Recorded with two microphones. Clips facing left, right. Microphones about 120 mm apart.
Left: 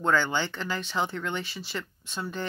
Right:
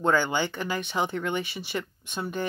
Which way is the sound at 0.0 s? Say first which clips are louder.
Right 2 dB; 15° right (ahead or behind).